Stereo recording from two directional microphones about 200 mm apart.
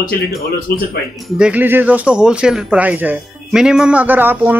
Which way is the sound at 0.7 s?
50° left (ahead or behind).